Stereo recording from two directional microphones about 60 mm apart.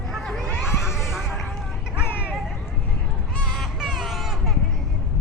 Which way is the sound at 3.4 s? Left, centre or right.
Centre.